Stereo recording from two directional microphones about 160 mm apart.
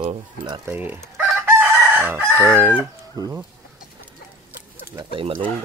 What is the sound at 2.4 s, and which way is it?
Speech, 15° right (ahead or behind).